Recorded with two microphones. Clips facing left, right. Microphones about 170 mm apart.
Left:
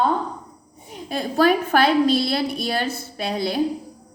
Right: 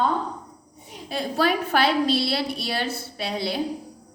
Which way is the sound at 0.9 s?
50° left (ahead or behind).